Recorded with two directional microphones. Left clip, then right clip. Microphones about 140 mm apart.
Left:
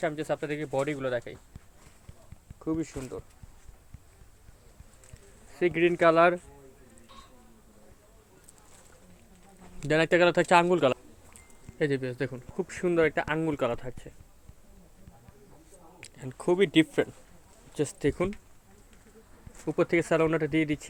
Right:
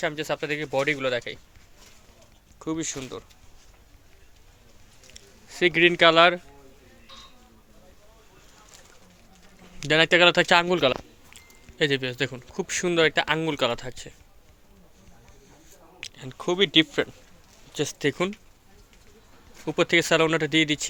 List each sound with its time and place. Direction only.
0.0 s speech: 5° left (ahead or behind)
2.6 s speech: 20° right (ahead or behind)
3.1 s speech: centre (ahead or behind)
5.5 s speech: 15° right (ahead or behind)
9.8 s speech: 5° left (ahead or behind)
16.0 s speech: 10° left (ahead or behind)
17.7 s speech: 5° left (ahead or behind)
20.1 s speech: 20° right (ahead or behind)